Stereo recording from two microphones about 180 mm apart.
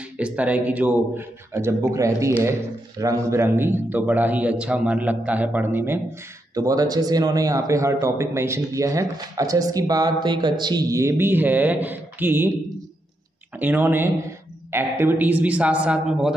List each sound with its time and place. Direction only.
0.2 s a man's voice: 10° right (ahead or behind)
13.6 s a man's voice: 10° right (ahead or behind)